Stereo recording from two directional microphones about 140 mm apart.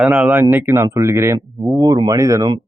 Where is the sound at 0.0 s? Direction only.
10° right (ahead or behind).